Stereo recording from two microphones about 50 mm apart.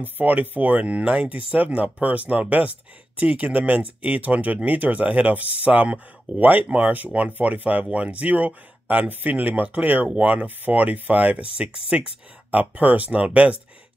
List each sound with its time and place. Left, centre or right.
0.0 s speech: right